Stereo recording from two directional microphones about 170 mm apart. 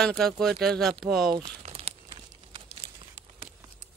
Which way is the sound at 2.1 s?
35° right (ahead or behind).